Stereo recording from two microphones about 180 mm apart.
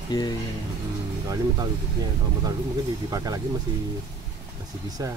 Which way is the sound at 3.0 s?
20° right (ahead or behind).